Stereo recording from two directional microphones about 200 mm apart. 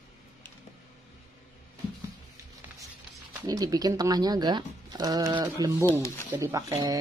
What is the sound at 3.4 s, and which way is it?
Speech, 20° right (ahead or behind).